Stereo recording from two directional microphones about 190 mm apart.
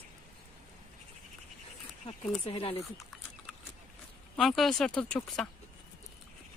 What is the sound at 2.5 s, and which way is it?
Speech, 30° left (ahead or behind).